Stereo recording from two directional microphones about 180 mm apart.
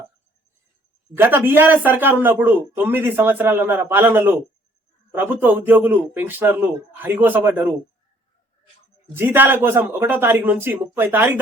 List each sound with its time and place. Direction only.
1.1 s a man's voice: 10° right (ahead or behind)
9.1 s a man's voice: 10° right (ahead or behind)